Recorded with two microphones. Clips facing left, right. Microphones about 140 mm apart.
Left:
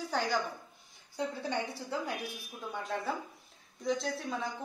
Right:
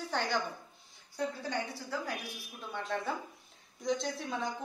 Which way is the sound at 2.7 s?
5° left (ahead or behind).